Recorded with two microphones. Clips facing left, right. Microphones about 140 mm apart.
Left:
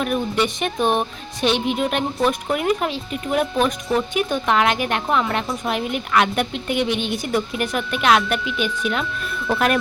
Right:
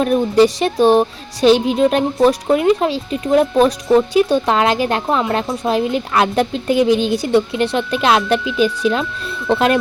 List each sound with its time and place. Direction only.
0.0 s a woman's voice: 35° right (ahead or behind)